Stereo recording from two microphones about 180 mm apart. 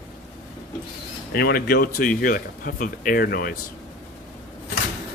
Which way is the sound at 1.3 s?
55° left (ahead or behind).